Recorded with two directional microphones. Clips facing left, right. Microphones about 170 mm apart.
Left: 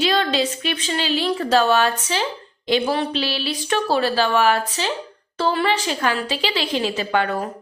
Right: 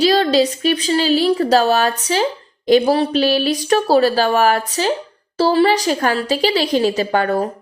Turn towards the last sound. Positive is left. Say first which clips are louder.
# right 4 dB
turn(degrees=-35)  # may be behind; listen again after turning